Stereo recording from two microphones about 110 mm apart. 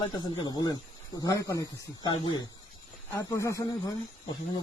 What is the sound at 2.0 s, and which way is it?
Speech, 40° left (ahead or behind).